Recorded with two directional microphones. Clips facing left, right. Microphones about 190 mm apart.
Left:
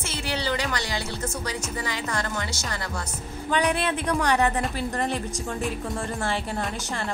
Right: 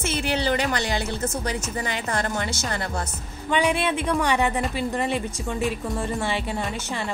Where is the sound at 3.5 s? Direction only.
Centre (ahead or behind).